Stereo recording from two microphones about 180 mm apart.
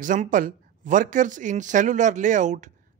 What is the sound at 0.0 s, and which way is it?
Speech, 45° right (ahead or behind).